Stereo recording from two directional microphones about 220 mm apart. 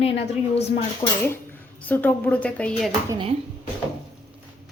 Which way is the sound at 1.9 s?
5° left (ahead or behind).